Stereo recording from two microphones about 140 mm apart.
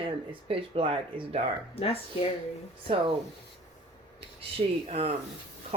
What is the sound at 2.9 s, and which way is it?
Speech, 45° right (ahead or behind).